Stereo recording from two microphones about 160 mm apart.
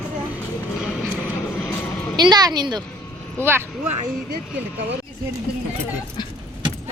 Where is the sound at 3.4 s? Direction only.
15° right (ahead or behind).